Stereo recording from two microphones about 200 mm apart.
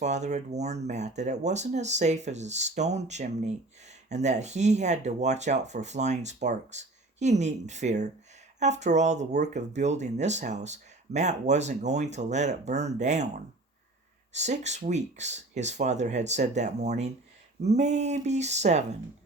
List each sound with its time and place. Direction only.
0.0 s speech: 35° right (ahead or behind)